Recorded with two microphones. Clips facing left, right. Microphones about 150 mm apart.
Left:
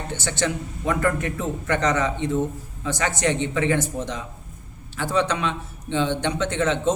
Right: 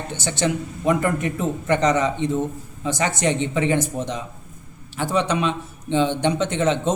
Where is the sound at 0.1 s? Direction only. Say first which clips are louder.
Right 3 dB; 15° right (ahead or behind).